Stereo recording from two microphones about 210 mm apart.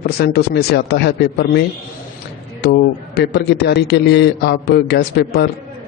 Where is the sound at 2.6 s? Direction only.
55° left (ahead or behind).